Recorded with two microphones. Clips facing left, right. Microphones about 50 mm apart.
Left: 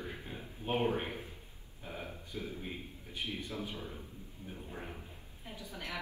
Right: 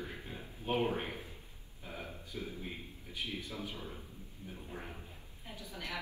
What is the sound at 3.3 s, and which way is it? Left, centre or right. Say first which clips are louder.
Speech: left 3 dB; left.